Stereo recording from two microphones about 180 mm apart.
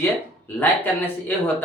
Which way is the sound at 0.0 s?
10° left (ahead or behind).